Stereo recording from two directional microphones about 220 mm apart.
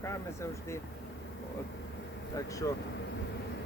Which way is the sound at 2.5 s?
15° left (ahead or behind).